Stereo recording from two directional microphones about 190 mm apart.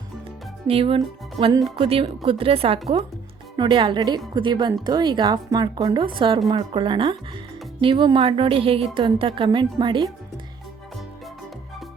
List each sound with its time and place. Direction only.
0.7 s a woman's voice: 30° right (ahead or behind)